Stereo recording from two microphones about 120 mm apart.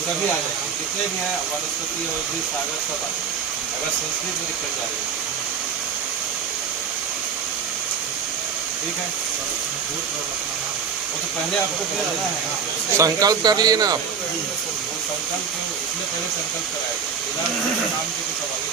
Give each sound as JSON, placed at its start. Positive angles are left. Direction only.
{"t": 13.0, "sound": "speech", "side_deg": -30}